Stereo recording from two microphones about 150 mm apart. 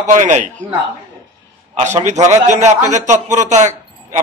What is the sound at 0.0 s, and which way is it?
Speech, 55° right (ahead or behind).